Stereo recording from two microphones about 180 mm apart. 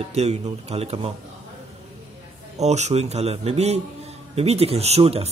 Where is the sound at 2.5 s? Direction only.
40° right (ahead or behind).